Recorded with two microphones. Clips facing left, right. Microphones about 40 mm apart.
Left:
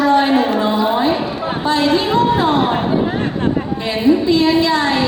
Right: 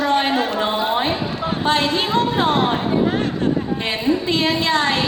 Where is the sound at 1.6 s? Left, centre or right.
Right.